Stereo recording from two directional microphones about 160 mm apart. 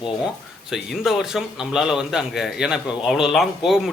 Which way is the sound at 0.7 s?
Centre (ahead or behind).